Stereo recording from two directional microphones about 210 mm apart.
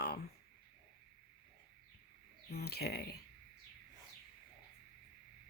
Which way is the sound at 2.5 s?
50° left (ahead or behind).